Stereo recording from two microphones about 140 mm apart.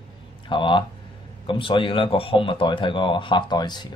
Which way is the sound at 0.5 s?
35° left (ahead or behind).